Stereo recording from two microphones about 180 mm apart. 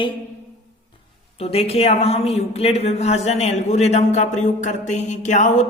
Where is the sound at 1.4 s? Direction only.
35° left (ahead or behind).